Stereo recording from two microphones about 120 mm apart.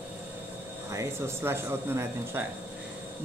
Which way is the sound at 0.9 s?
25° right (ahead or behind).